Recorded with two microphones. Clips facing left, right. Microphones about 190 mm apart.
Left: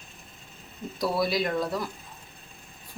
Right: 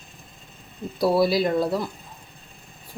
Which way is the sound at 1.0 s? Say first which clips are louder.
Right 7 dB; 30° right (ahead or behind).